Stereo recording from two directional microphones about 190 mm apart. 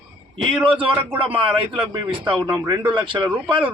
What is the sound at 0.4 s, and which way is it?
A man's voice, 30° right (ahead or behind).